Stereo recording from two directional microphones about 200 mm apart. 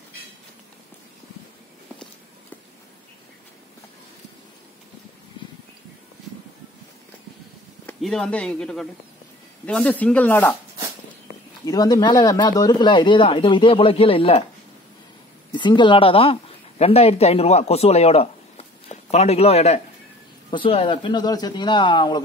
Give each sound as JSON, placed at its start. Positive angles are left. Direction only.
{"t": 7.8, "sound": "speech", "side_deg": 5}
{"t": 11.6, "sound": "speech", "side_deg": 20}
{"t": 15.5, "sound": "a woman's voice", "side_deg": 25}